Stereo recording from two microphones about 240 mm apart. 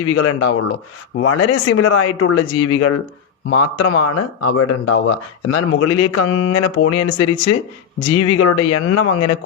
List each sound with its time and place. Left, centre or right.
0.0 s speech: left